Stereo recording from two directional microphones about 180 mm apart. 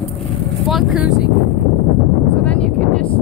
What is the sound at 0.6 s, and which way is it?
Speech, 5° right (ahead or behind).